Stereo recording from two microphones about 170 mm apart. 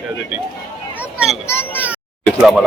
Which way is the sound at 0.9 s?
5° right (ahead or behind).